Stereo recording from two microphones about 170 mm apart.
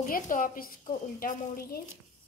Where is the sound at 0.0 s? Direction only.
50° left (ahead or behind).